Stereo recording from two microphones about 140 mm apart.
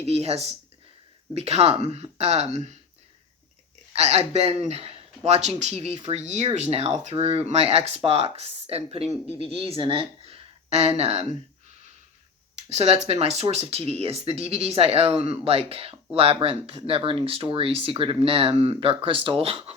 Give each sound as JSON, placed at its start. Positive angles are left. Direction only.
{"t": 0.0, "sound": "speech", "side_deg": -50}
{"t": 3.9, "sound": "speech", "side_deg": -50}
{"t": 12.5, "sound": "speech", "side_deg": -50}